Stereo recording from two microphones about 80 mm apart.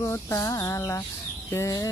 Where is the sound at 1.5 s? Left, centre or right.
Left.